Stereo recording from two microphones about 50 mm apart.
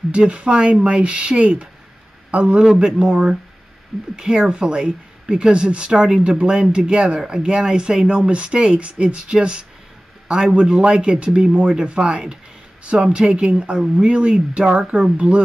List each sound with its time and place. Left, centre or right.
0.1 s speech: right
2.6 s speech: centre